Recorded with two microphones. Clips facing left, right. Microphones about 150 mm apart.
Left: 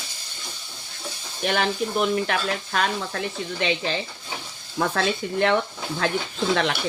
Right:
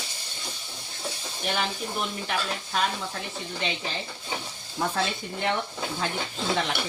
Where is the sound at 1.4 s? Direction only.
70° left (ahead or behind); by 5.5 s 90° left.